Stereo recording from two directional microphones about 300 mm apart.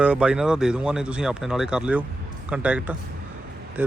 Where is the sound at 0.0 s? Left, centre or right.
Centre.